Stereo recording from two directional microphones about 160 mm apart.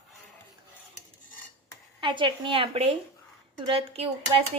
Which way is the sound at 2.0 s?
30° right (ahead or behind).